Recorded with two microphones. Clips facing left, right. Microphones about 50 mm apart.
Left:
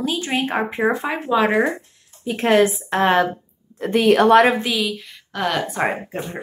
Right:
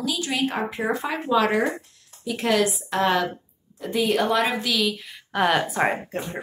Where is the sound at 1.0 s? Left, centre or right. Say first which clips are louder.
Left 3 dB; left.